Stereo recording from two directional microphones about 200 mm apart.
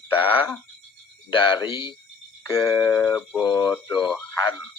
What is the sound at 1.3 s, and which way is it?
Speech, 25° left (ahead or behind).